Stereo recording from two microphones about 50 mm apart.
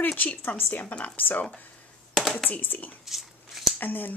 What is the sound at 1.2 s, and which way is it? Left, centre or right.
Speech, left.